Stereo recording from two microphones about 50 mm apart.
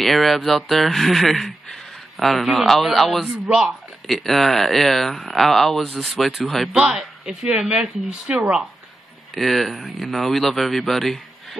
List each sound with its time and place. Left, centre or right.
0.0 s speech: centre
3.4 s speech: centre
4.1 s speech: centre; by 8.5 s right
9.3 s speech: centre